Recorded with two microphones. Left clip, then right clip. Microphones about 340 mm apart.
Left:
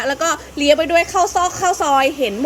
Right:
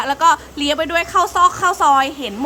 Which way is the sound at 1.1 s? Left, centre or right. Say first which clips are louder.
Even; right.